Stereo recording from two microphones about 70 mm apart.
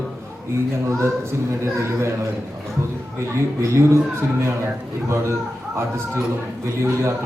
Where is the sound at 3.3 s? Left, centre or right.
Right.